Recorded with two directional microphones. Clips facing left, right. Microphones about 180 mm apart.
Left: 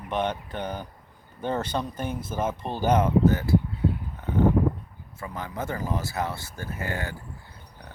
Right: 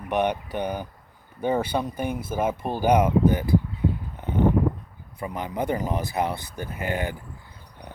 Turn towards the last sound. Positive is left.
turn(degrees=-20)  # may be behind; listen again after turning